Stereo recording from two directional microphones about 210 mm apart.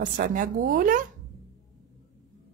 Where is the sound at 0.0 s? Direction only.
40° right (ahead or behind).